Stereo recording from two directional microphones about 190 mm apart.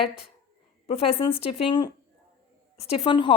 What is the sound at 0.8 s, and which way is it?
A woman's voice, 30° left (ahead or behind).